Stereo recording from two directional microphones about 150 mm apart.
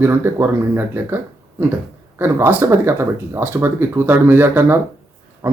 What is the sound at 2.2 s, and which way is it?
Speech, 15° right (ahead or behind).